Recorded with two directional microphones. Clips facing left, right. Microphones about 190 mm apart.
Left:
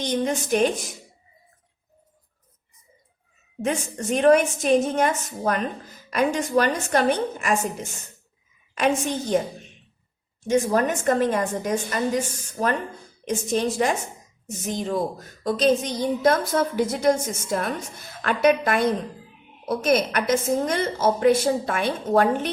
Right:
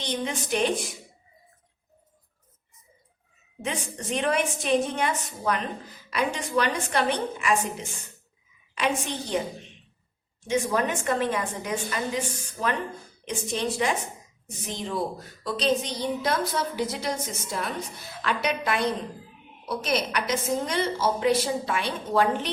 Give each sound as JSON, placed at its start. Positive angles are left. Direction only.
{"t": 0.0, "sound": "a woman's voice", "side_deg": 45}
{"t": 3.6, "sound": "a woman's voice", "side_deg": 45}
{"t": 10.4, "sound": "a woman's voice", "side_deg": 45}